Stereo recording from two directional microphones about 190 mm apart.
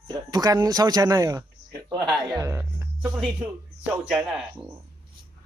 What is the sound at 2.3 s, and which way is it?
Speech, 15° right (ahead or behind).